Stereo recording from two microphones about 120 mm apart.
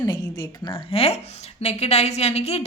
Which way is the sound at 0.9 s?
55° left (ahead or behind).